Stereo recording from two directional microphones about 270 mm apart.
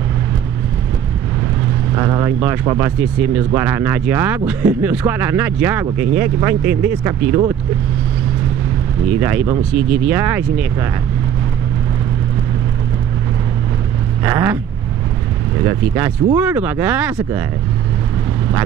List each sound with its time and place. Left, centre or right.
2.0 s speech: centre
9.1 s speech: centre
14.2 s speech: centre
15.6 s speech: centre